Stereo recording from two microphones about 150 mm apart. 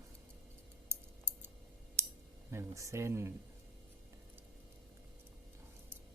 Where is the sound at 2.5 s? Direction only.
20° right (ahead or behind).